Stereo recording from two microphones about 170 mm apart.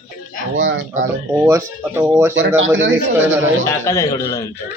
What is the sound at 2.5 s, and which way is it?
Speech, 90° right.